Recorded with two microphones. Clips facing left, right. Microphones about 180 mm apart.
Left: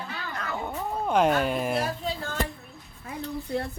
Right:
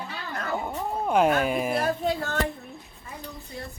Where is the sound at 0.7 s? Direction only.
5° right (ahead or behind).